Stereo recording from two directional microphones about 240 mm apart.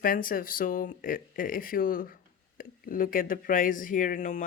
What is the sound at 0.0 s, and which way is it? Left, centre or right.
Speech, left.